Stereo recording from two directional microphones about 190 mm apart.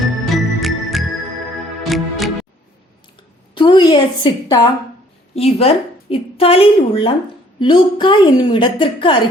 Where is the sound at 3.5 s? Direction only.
25° left (ahead or behind).